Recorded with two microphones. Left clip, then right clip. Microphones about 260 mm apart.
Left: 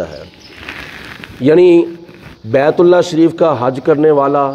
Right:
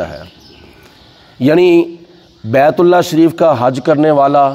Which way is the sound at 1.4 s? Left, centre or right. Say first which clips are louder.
Left 1 dB; right.